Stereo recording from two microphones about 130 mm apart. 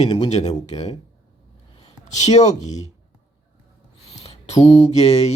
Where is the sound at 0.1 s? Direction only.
55° left (ahead or behind).